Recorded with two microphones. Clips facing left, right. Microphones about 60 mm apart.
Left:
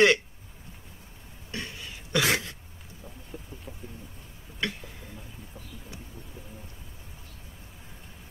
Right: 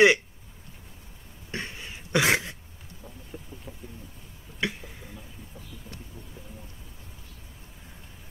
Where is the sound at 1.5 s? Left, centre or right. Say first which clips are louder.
Right 2 dB; right.